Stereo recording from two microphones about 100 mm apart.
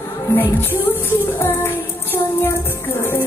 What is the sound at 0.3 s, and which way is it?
Speech, 25° left (ahead or behind).